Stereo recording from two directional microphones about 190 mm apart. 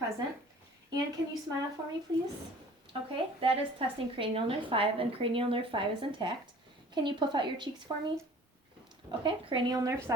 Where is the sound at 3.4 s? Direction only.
30° right (ahead or behind).